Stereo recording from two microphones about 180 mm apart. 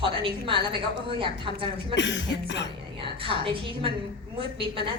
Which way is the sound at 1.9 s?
80° left.